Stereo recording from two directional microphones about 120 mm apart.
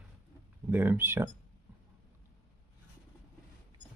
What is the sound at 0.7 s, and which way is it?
Speech, 15° right (ahead or behind).